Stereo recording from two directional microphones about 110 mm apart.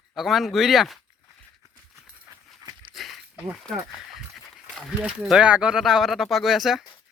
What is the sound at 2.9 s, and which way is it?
Walk, centre (ahead or behind).